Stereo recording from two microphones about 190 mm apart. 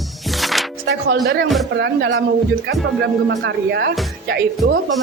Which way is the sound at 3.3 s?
60° right (ahead or behind).